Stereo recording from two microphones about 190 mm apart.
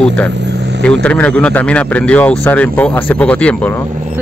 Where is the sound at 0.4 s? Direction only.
65° right (ahead or behind).